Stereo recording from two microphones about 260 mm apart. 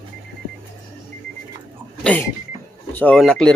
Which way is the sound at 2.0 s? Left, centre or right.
Centre.